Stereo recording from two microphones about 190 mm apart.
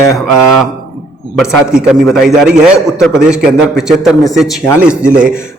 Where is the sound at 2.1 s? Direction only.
Centre (ahead or behind).